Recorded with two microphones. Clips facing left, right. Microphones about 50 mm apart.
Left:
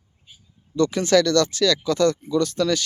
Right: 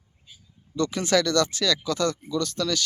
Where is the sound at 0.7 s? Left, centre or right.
Centre.